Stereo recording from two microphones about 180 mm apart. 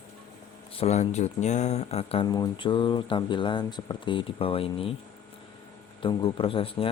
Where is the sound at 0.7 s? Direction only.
35° left (ahead or behind).